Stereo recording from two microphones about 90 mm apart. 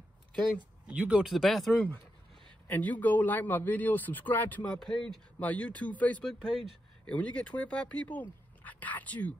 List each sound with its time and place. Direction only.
0.8 s speech: 10° right (ahead or behind)
1.3 s speech: centre (ahead or behind)
1.7 s speech: 20° left (ahead or behind)
4.7 s speech: 5° left (ahead or behind)